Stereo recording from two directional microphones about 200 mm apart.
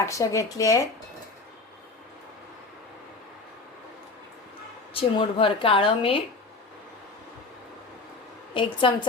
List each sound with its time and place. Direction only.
0.0 s speech: 15° left (ahead or behind)
4.9 s speech: 25° left (ahead or behind)
8.5 s speech: 25° left (ahead or behind)